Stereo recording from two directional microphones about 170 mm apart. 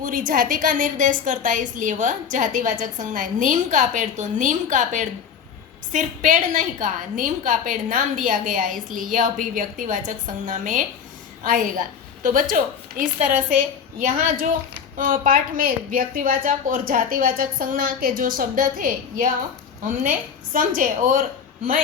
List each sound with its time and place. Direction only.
0.0 s a woman's voice: 50° right (ahead or behind)